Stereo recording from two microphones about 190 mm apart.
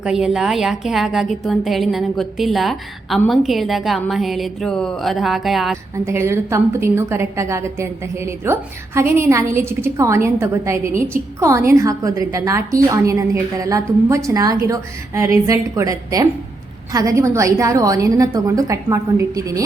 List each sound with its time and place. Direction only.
0.0 s a woman's voice: 5° right (ahead or behind)
6.1 s a woman's voice: 15° right (ahead or behind)